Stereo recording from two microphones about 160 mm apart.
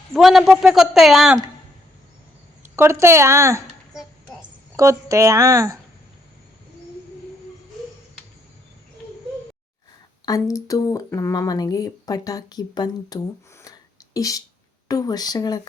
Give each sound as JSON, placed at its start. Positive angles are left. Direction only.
{"t": 0.1, "sound": "speech", "side_deg": 0}
{"t": 2.7, "sound": "speech", "side_deg": -15}
{"t": 4.8, "sound": "speech", "side_deg": -20}
{"t": 10.2, "sound": "speech", "side_deg": 20}